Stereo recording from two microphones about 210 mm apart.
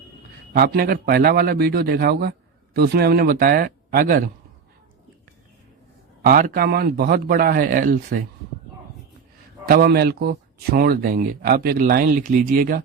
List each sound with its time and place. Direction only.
0.5 s speech: 45° right (ahead or behind)
6.2 s speech: 45° right (ahead or behind)
9.6 s speech: 45° right (ahead or behind)